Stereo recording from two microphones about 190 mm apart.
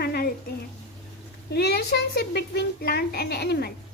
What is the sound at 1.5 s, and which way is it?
A woman's voice, 60° left (ahead or behind).